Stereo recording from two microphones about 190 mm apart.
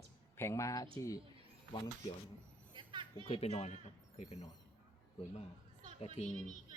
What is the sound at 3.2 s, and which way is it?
Speech, 30° left (ahead or behind).